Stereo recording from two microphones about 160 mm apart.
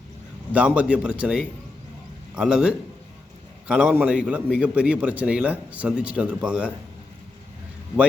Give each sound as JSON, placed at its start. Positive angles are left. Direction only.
{"t": 0.5, "sound": "a man's voice", "side_deg": -10}